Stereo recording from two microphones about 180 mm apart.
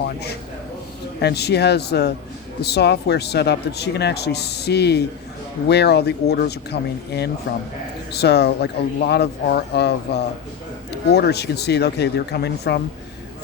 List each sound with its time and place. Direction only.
1.2 s speech: 65° left (ahead or behind)